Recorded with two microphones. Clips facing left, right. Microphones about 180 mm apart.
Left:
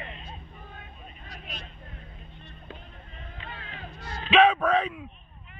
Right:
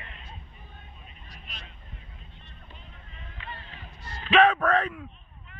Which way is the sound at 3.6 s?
90° left.